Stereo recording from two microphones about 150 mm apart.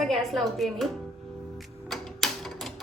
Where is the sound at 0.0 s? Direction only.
Centre (ahead or behind).